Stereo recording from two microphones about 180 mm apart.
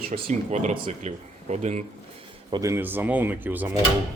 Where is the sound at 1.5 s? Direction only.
40° right (ahead or behind).